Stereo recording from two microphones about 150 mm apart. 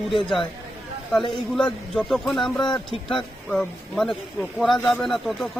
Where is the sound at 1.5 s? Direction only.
Centre (ahead or behind).